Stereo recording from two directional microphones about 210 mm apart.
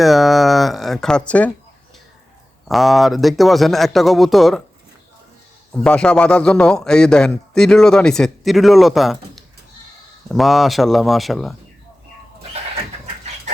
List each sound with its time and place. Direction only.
0.0 s a man's voice: centre (ahead or behind)
2.6 s a man's voice: centre (ahead or behind)
5.7 s a man's voice: 5° left (ahead or behind)